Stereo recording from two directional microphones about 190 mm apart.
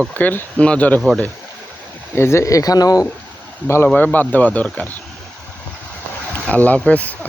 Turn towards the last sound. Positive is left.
turn(degrees=10)  # may be behind; listen again after turning